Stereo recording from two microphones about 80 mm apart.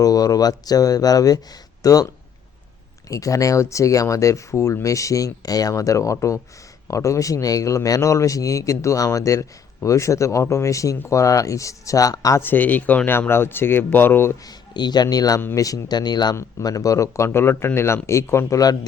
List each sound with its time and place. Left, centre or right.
0.0 s speech: left
3.1 s speech: left
12.4 s speech: left
13.1 s speech: left
14.4 s speech: left
16.3 s speech: left
17.2 s speech: left